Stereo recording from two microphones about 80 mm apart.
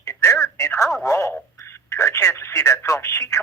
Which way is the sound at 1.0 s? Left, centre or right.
Left.